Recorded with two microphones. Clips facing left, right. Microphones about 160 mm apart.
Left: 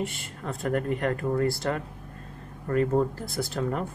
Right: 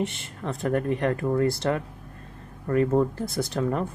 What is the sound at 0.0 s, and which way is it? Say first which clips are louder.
Speech: right 3 dB; 20° right (ahead or behind).